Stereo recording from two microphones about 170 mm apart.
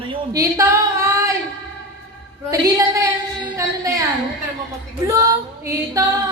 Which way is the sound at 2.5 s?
20° right (ahead or behind).